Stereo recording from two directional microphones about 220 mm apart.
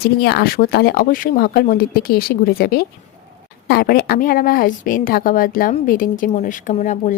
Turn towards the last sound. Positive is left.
turn(degrees=35)  # may be behind; listen again after turning